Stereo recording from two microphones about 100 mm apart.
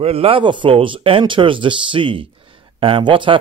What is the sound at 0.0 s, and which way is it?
Speech, 75° right (ahead or behind).